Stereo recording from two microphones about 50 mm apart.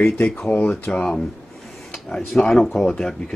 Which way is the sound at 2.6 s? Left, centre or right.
Centre.